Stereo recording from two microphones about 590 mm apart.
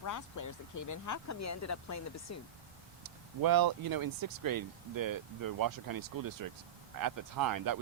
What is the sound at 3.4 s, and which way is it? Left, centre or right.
Speech, right.